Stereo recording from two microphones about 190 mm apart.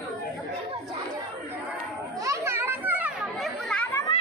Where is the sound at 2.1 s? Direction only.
15° right (ahead or behind); by 3.8 s centre (ahead or behind).